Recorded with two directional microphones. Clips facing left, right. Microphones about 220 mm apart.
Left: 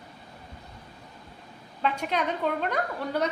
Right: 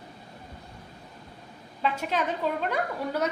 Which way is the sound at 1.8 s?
5° right (ahead or behind).